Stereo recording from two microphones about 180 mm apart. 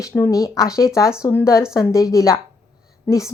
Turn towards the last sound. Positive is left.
turn(degrees=15)  # may be behind; listen again after turning